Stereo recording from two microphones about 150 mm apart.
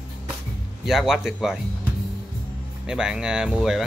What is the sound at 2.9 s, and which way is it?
Speech, 5° right (ahead or behind).